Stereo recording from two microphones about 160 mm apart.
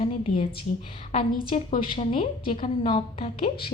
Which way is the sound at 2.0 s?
35° left (ahead or behind).